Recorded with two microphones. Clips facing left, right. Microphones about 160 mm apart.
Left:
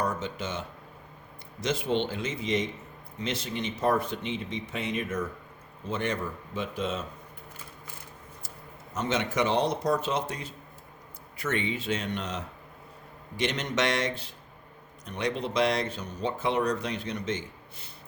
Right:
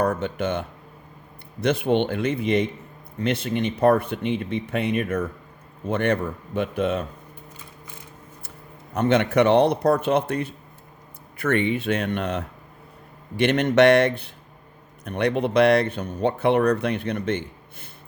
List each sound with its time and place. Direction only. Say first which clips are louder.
0.0 s speech: right 8 dB; 60° right (ahead or behind)
1.6 s speech: right 7 dB; 60° right (ahead or behind)
9.0 s speech: right 9 dB; 60° right (ahead or behind)